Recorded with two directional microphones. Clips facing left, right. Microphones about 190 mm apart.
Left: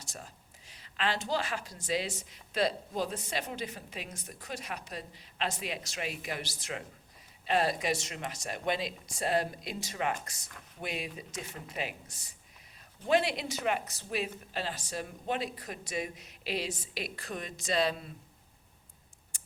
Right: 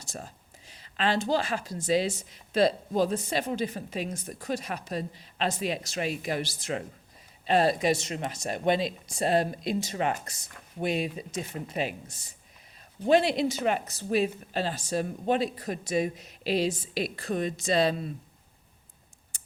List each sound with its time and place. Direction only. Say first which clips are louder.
0.2 s speech: right 7 dB; 35° right (ahead or behind)
13.1 s speech: right 6 dB; 30° right (ahead or behind)